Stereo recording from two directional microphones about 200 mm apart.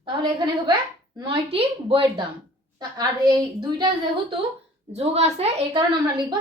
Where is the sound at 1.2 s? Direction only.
25° right (ahead or behind).